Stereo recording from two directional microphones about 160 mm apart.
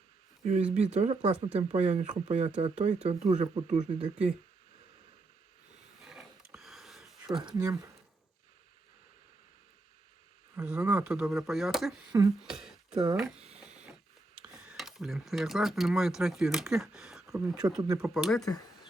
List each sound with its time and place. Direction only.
0.4 s speech: 45° right (ahead or behind)
6.1 s sniff: 5° right (ahead or behind)
7.3 s speech: 25° right (ahead or behind)
10.5 s speech: 5° right (ahead or behind)
14.5 s speech: 5° right (ahead or behind)